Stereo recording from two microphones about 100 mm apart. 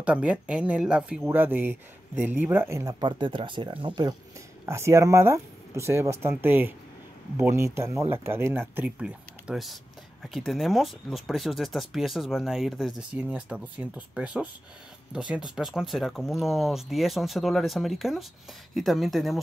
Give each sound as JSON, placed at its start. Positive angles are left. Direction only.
{"t": 0.0, "sound": "speech", "side_deg": -10}
{"t": 1.3, "sound": "speech", "side_deg": -20}
{"t": 2.8, "sound": "speech", "side_deg": -40}
{"t": 3.1, "sound": "speech", "side_deg": -55}
{"t": 4.6, "sound": "speech", "side_deg": -25}
{"t": 9.0, "sound": "speech", "side_deg": -5}